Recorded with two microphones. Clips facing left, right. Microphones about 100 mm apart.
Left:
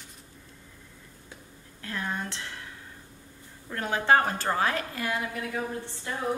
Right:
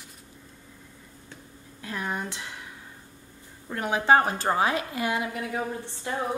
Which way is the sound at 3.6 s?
15° right (ahead or behind).